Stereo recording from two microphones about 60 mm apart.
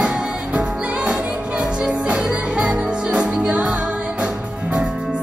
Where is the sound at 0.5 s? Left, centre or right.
Centre.